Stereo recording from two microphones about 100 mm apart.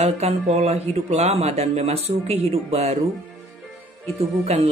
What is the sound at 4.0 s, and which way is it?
Speech, 90° right.